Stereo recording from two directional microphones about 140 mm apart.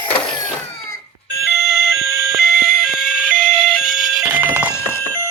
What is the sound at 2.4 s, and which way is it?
Emergency vehicle, centre (ahead or behind).